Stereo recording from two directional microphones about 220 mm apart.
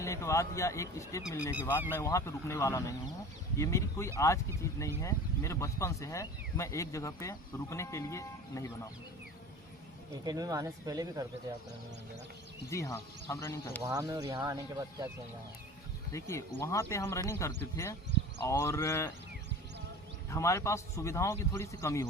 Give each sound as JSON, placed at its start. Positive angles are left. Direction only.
{"t": 0.0, "sound": "speech", "side_deg": 15}
{"t": 10.2, "sound": "speech", "side_deg": -15}
{"t": 12.7, "sound": "speech", "side_deg": 15}
{"t": 13.8, "sound": "speech", "side_deg": -15}
{"t": 16.1, "sound": "speech", "side_deg": 10}
{"t": 20.3, "sound": "speech", "side_deg": 15}